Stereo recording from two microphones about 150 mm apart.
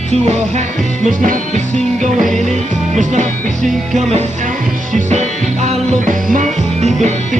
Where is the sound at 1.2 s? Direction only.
55° right (ahead or behind).